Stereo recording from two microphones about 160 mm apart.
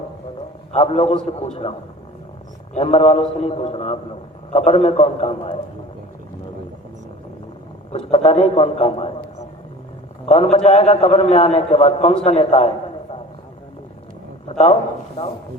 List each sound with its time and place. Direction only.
0.7 s a man's voice: 40° left (ahead or behind)
2.7 s a man's voice: 40° left (ahead or behind)
7.9 s a man's voice: 40° left (ahead or behind)
10.2 s a man's voice: 40° left (ahead or behind)